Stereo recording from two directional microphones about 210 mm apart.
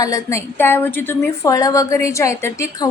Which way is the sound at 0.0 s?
15° left (ahead or behind).